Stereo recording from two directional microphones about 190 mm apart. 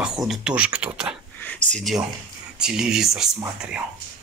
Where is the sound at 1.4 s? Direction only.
5° left (ahead or behind).